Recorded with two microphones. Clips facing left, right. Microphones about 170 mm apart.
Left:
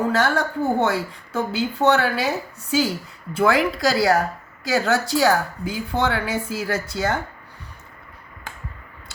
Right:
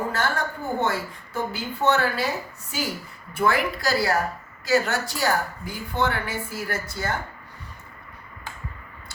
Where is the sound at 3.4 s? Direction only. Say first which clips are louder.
Left 4 dB; 90° left.